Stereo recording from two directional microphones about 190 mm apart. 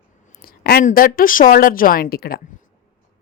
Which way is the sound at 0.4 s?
55° left (ahead or behind).